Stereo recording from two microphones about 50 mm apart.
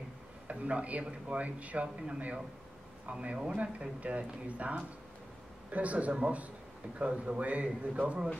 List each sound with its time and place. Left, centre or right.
0.5 s a man's voice: right